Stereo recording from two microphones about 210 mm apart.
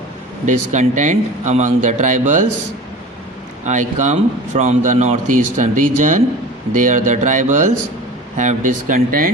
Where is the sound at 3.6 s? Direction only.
35° right (ahead or behind).